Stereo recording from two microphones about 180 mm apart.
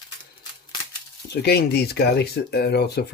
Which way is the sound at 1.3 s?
65° left (ahead or behind).